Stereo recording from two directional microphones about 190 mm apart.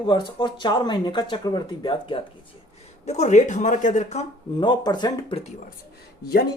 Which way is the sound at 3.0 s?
35° left (ahead or behind).